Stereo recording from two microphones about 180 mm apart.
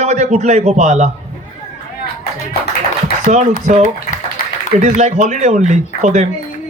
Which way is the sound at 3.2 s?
45° right (ahead or behind).